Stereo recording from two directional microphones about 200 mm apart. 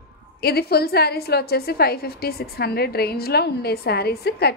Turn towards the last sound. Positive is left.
turn(degrees=50)  # may be behind; listen again after turning